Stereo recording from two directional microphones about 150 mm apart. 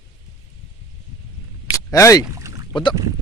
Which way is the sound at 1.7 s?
20° left (ahead or behind).